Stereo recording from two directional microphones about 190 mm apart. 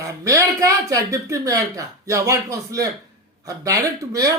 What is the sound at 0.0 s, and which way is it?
Speech, 15° right (ahead or behind).